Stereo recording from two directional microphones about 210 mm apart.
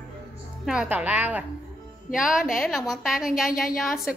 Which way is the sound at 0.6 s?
5° right (ahead or behind).